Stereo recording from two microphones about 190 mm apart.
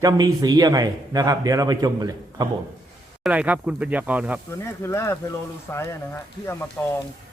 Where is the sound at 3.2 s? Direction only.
5° right (ahead or behind).